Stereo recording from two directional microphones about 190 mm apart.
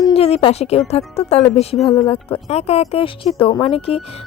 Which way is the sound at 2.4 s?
35° left (ahead or behind).